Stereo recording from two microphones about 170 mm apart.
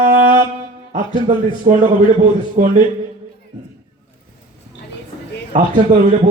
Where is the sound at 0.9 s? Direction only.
50° right (ahead or behind).